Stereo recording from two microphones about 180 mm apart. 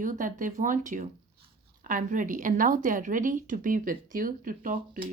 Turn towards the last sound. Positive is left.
turn(degrees=-50)  # may be behind; listen again after turning